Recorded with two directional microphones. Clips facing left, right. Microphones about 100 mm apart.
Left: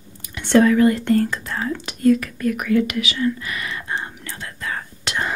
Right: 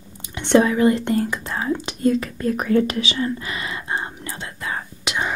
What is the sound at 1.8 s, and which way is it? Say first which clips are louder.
Whispering: left 6 dB; 25° right (ahead or behind).